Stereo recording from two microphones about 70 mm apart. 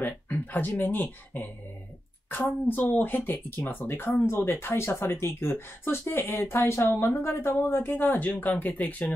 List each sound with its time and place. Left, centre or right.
0.0 s speech: left